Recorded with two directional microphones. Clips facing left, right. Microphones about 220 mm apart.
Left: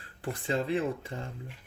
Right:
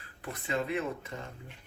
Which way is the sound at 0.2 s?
30° left (ahead or behind).